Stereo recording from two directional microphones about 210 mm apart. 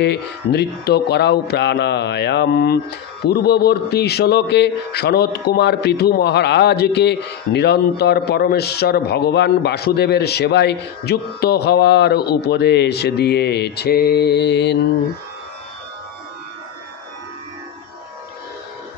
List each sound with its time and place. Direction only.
0.0 s a man's voice: 55° left (ahead or behind)